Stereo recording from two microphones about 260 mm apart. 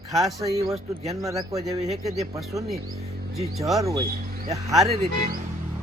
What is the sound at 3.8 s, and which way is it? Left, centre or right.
Speech, centre.